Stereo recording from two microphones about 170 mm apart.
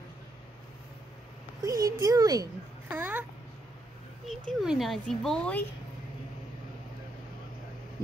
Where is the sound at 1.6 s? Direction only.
20° right (ahead or behind).